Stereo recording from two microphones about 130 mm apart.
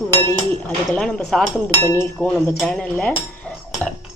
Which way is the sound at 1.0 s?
5° left (ahead or behind).